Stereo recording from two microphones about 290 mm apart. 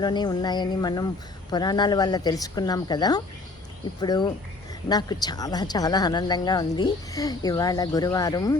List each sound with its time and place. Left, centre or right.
0.0 s a woman's voice: centre